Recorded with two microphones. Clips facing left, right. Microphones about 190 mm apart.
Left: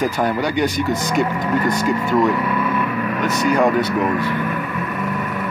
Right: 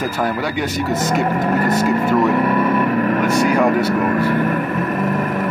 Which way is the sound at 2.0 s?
50° right (ahead or behind).